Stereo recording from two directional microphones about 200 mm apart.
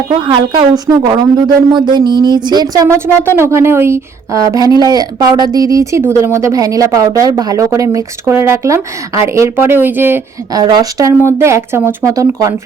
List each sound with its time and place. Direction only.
0.1 s a woman's voice: 20° right (ahead or behind)